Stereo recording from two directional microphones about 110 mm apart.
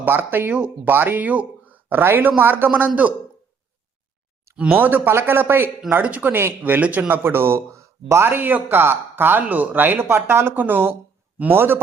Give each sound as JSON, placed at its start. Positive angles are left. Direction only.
{"t": 0.0, "sound": "speech", "side_deg": -15}
{"t": 4.5, "sound": "speech", "side_deg": -15}